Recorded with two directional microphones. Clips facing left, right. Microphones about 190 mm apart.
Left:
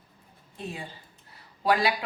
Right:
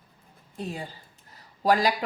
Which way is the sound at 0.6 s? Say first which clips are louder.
Right 3 dB; 40° right (ahead or behind).